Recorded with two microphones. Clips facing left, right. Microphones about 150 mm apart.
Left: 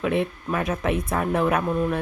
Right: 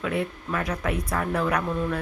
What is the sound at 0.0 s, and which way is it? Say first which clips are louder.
Speech: left 4 dB; 20° left (ahead or behind).